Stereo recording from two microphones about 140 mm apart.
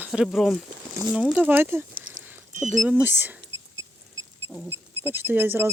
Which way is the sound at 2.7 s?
5° right (ahead or behind).